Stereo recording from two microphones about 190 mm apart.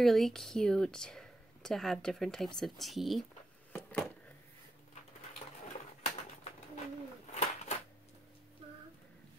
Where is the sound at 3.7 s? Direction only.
5° left (ahead or behind).